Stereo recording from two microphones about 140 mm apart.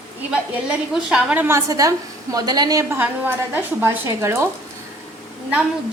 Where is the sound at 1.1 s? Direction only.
10° right (ahead or behind).